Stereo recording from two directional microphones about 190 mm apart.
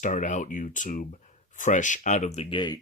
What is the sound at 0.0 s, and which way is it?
Speech, 40° left (ahead or behind).